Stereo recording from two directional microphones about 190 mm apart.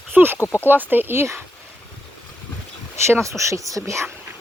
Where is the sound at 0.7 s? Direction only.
10° right (ahead or behind).